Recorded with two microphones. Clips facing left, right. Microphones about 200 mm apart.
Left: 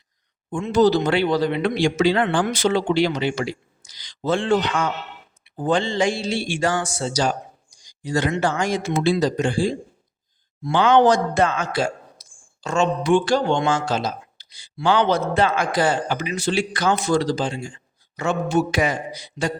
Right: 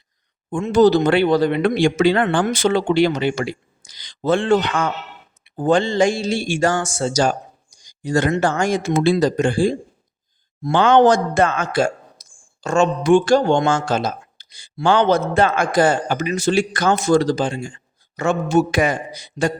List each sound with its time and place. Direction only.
0.5 s speech: 50° right (ahead or behind)